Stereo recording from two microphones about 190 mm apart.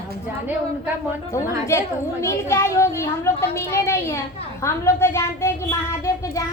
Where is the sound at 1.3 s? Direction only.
15° left (ahead or behind).